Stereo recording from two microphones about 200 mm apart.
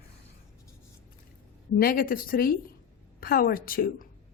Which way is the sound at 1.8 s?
45° left (ahead or behind).